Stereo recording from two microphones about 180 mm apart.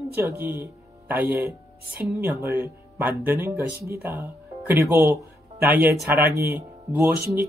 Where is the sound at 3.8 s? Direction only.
60° right (ahead or behind).